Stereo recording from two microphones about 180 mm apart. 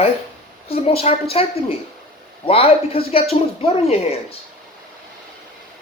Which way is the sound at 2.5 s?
30° left (ahead or behind).